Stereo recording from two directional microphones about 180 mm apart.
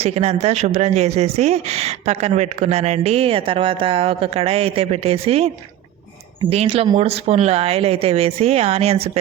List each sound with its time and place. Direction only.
0.0 s speech: 35° right (ahead or behind)
6.5 s speech: 35° right (ahead or behind)